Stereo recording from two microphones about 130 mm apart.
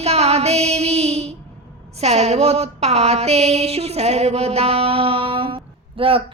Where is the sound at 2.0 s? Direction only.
55° right (ahead or behind).